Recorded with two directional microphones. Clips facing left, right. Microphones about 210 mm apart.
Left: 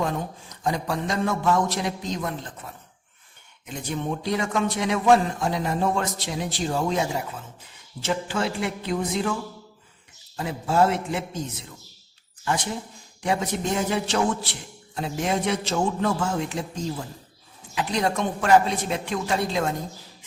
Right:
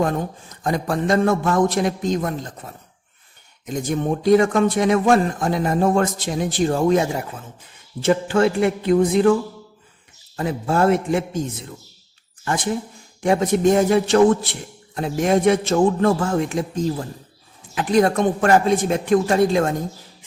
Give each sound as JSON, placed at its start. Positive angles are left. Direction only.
{"t": 0.0, "sound": "a man's voice", "side_deg": -50}
{"t": 10.3, "sound": "a man's voice", "side_deg": -55}
{"t": 13.2, "sound": "a man's voice", "side_deg": -50}